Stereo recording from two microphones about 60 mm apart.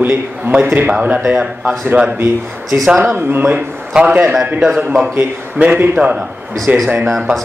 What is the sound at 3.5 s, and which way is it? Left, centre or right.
A man's voice, centre.